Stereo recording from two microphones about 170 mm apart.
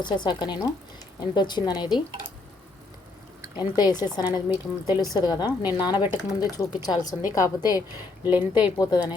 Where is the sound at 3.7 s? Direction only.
25° left (ahead or behind).